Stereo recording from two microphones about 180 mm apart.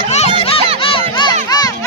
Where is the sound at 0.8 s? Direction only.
25° left (ahead or behind).